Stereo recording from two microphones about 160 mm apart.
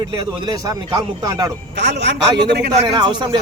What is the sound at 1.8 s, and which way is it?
Speech, 90° right.